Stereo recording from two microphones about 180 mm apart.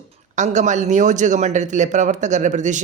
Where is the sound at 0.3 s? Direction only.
40° right (ahead or behind).